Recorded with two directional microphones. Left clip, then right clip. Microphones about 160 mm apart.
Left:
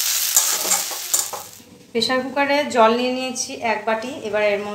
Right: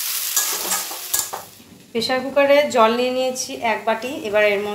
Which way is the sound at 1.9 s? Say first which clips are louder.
Right 1 dB; 5° right (ahead or behind).